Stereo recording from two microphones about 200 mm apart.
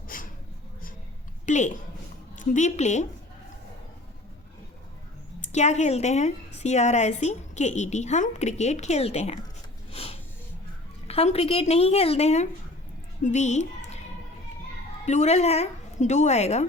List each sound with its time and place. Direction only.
0.1 s a sound: 45° left (ahead or behind)
1.5 s a woman's voice: 35° left (ahead or behind)
5.4 s a woman's voice: 35° left (ahead or behind)
9.9 s a sound: 30° left (ahead or behind)
11.1 s a woman's voice: 30° left (ahead or behind)
15.0 s a woman's voice: 35° left (ahead or behind)